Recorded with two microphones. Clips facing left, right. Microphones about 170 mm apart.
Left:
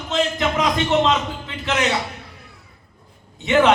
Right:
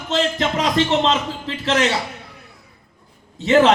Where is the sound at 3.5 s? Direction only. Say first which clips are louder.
Right 2 dB; 30° right (ahead or behind).